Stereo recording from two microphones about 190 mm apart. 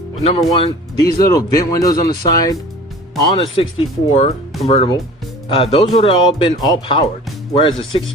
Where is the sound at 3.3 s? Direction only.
30° left (ahead or behind).